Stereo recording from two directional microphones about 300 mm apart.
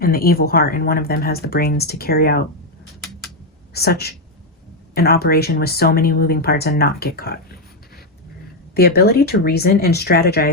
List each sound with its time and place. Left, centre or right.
0.0 s speech: left
3.8 s speech: left
8.7 s speech: left